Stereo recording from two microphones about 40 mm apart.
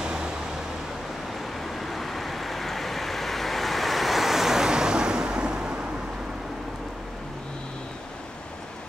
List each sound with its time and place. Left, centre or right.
0.0 s vehicle: right
1.6 s vehicle: centre; by 5.8 s right